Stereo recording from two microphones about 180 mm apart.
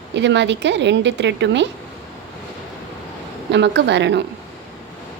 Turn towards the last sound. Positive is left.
turn(degrees=-75)  # may be behind; listen again after turning